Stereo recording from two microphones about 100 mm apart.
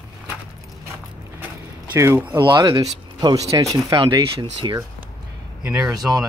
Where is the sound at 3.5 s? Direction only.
35° right (ahead or behind).